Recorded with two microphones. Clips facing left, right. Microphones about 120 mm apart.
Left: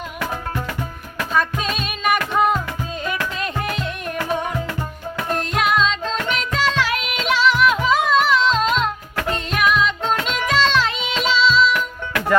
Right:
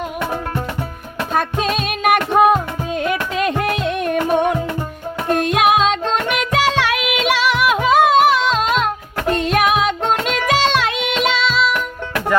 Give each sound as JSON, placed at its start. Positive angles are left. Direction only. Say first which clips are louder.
{"t": 1.3, "sound": "music", "louder": "right 3 dB", "side_deg": -50}
{"t": 7.3, "sound": "music", "louder": "left 1 dB", "side_deg": -65}